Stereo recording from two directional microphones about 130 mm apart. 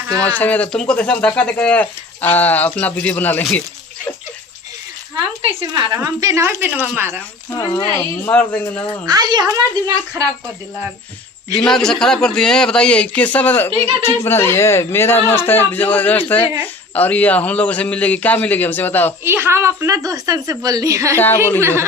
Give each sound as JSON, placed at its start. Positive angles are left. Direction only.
{"t": 0.2, "sound": "speech", "side_deg": 10}
{"t": 5.9, "sound": "a woman's voice", "side_deg": -25}
{"t": 7.5, "sound": "speech", "side_deg": 30}
{"t": 8.2, "sound": "speech", "side_deg": 15}
{"t": 9.0, "sound": "a woman's voice", "side_deg": -30}
{"t": 11.5, "sound": "a man's voice", "side_deg": 5}
{"t": 19.2, "sound": "a woman's voice", "side_deg": -20}
{"t": 21.2, "sound": "speech", "side_deg": 15}
{"t": 21.6, "sound": "a woman's voice", "side_deg": -20}